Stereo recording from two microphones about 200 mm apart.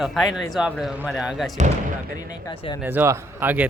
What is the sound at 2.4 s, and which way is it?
Speech, 20° left (ahead or behind).